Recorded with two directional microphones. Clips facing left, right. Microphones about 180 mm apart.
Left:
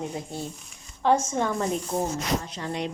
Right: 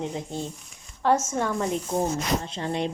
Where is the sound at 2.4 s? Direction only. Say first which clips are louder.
Right 3 dB; 25° right (ahead or behind).